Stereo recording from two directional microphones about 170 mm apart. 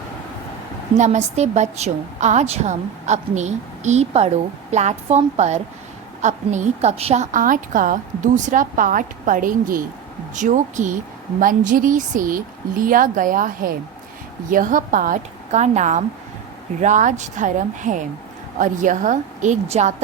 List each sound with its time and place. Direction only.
0.9 s a woman's voice: 45° right (ahead or behind)